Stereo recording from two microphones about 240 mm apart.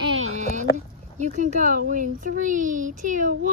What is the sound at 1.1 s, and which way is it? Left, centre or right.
Speech, right.